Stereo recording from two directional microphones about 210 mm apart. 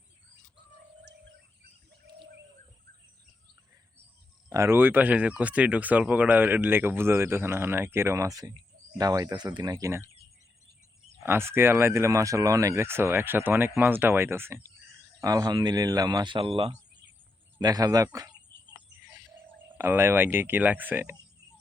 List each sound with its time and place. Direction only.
4.4 s speech: 15° right (ahead or behind)
11.2 s speech: 10° right (ahead or behind)
19.7 s speech: 10° right (ahead or behind)